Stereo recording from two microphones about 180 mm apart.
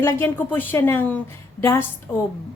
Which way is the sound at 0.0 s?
15° left (ahead or behind).